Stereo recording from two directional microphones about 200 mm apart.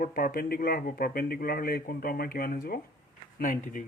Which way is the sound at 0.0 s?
45° left (ahead or behind).